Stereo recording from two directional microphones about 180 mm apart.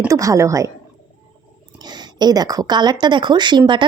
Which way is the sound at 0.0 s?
15° right (ahead or behind).